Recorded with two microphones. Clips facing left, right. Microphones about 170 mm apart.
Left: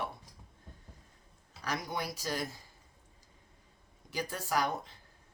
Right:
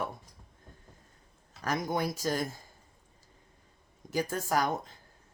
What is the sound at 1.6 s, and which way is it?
Speech, 45° right (ahead or behind).